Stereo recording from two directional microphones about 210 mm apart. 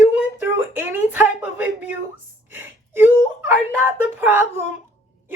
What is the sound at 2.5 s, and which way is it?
Whimper, 10° right (ahead or behind).